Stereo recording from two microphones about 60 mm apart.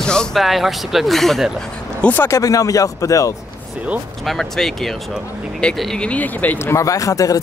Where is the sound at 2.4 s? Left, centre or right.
Left.